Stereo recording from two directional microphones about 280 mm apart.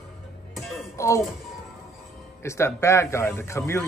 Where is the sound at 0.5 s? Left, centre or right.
Centre.